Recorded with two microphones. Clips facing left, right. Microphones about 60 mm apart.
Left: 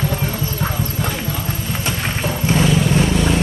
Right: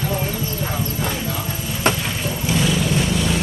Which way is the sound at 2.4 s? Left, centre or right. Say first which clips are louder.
Left 4 dB; left.